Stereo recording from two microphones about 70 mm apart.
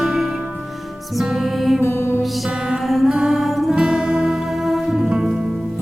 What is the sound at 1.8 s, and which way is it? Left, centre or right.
Music, left.